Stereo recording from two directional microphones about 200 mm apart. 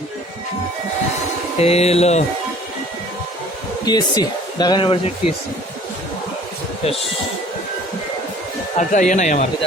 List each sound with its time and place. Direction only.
1.5 s mantra: 30° left (ahead or behind)
3.8 s speech: 20° left (ahead or behind)
6.8 s speech: 30° left (ahead or behind)
8.8 s mantra: 40° left (ahead or behind)